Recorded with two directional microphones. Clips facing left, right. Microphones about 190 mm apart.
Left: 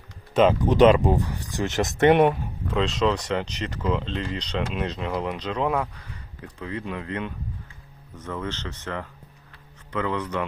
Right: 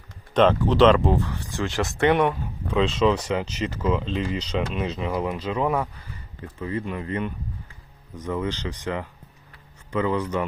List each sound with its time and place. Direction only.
0.6 s speech: 15° left (ahead or behind)
2.7 s speech: centre (ahead or behind)